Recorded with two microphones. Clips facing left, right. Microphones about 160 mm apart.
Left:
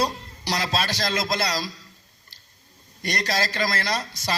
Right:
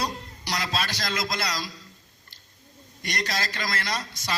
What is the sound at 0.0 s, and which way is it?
A man's voice, 30° left (ahead or behind).